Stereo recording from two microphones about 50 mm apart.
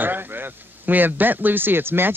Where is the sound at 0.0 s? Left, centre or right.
Right.